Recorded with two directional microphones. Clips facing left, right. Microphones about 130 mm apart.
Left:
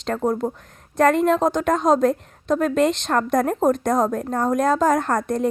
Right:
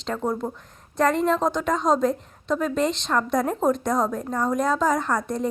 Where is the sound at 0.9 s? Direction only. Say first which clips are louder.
Left 4 dB; 55° left (ahead or behind).